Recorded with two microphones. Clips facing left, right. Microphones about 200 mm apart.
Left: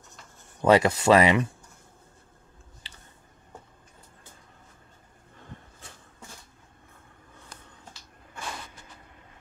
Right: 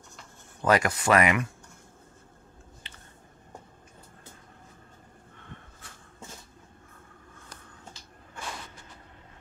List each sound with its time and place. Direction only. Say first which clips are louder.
0.6 s speech: left 4 dB; 25° left (ahead or behind)